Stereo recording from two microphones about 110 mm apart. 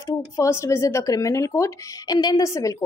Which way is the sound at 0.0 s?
25° left (ahead or behind).